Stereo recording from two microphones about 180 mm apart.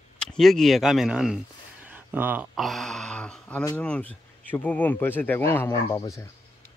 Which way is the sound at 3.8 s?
5° left (ahead or behind).